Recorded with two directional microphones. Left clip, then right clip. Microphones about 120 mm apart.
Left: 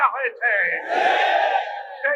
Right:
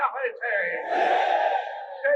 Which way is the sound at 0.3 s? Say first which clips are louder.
Left 6 dB; 35° left (ahead or behind).